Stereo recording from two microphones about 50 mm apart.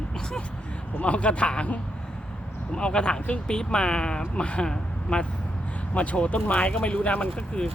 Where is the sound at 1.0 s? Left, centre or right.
Left.